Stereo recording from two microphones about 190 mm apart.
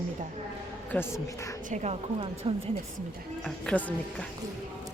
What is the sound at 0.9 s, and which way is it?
Speech, 10° left (ahead or behind).